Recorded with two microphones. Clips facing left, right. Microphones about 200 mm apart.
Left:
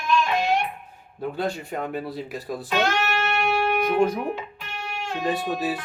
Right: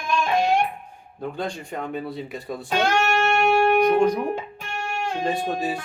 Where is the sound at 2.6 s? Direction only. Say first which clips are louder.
Right 3 dB; 45° right (ahead or behind).